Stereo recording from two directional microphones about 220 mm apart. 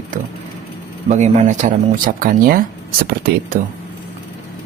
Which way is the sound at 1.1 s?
35° right (ahead or behind).